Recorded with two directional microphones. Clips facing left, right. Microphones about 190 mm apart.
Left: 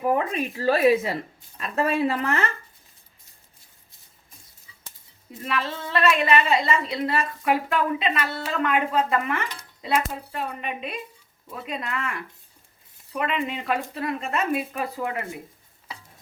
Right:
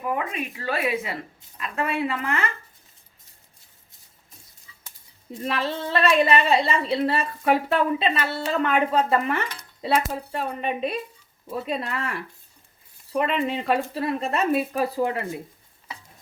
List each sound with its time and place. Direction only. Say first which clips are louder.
0.0 s speech: left 4 dB; 35° left (ahead or behind)
5.4 s speech: right 2 dB; 35° right (ahead or behind)